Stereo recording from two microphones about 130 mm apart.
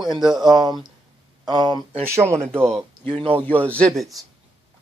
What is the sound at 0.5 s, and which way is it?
Speech, 30° right (ahead or behind).